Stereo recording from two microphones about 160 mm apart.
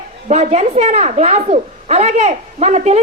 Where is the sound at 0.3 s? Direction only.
45° right (ahead or behind).